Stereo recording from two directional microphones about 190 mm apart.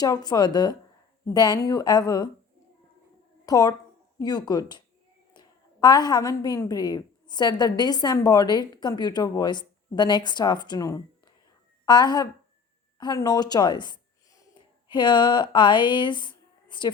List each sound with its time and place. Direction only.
0.0 s speech: 20° left (ahead or behind)
3.4 s a woman's voice: 15° left (ahead or behind)